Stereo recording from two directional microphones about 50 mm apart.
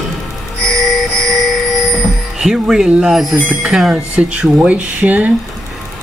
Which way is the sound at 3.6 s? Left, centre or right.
Centre.